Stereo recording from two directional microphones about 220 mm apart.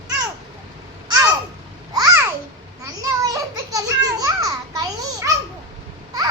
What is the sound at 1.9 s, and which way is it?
Babbling, 15° right (ahead or behind).